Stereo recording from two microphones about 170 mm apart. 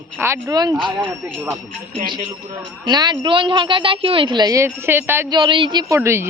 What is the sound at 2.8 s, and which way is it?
A woman's voice, 25° right (ahead or behind).